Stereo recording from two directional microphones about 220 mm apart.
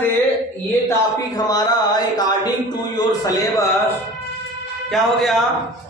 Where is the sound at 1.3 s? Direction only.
15° left (ahead or behind).